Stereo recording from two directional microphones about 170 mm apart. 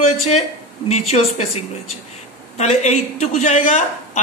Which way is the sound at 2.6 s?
40° left (ahead or behind).